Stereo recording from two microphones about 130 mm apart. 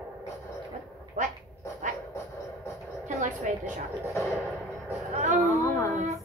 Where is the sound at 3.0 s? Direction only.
65° right (ahead or behind).